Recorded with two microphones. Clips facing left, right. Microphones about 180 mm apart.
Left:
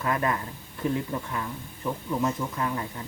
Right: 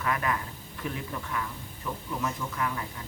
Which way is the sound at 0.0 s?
25° left (ahead or behind).